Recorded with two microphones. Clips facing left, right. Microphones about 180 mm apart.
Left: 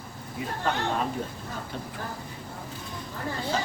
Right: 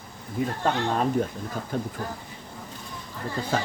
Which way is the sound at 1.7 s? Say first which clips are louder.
Right 11 dB; 45° right (ahead or behind).